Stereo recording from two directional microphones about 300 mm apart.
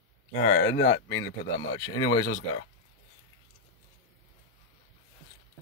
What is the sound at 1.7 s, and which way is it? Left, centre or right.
Speech, centre.